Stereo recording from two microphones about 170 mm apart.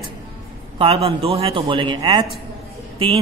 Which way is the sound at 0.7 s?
30° right (ahead or behind).